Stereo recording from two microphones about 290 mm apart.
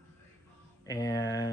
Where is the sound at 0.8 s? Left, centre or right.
Centre.